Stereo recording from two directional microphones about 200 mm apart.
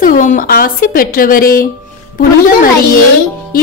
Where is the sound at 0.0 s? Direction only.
40° left (ahead or behind).